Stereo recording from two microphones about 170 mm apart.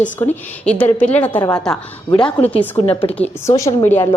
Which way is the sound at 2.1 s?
30° left (ahead or behind).